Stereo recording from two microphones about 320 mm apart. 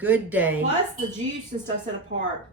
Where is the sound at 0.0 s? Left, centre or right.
Centre.